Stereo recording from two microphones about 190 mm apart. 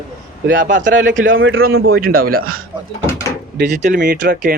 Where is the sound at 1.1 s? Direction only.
90° right.